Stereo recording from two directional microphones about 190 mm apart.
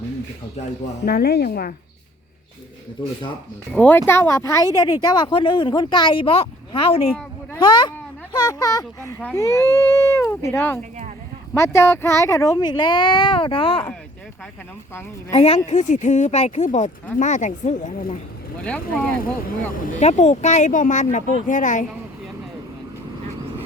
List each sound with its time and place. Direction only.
1.0 s a woman's voice: 55° left (ahead or behind)
3.0 s speech: 25° left (ahead or behind)
3.7 s speech: 5° left (ahead or behind); by 13.8 s 30° left (ahead or behind)
15.3 s speech: 30° left (ahead or behind)
19.2 s speech: 50° left (ahead or behind)